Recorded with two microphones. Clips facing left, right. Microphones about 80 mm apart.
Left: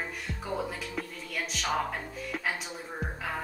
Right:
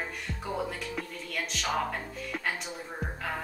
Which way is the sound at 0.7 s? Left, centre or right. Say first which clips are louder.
Even; centre.